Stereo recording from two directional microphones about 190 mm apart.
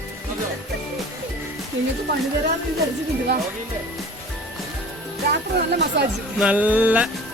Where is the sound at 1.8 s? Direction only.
75° right (ahead or behind).